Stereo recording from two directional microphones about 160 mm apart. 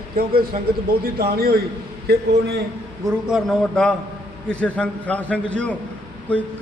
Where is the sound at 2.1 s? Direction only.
90° right.